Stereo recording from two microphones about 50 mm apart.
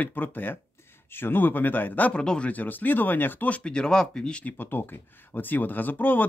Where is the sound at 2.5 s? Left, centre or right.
Left.